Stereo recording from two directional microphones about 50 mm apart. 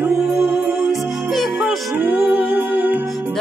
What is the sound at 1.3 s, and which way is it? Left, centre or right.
Music, centre.